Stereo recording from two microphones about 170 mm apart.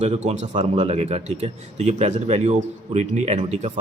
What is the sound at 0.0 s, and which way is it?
A man's voice, 40° right (ahead or behind).